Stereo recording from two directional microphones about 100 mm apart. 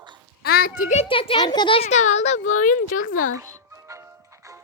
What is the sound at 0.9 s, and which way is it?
Speech, 60° left (ahead or behind).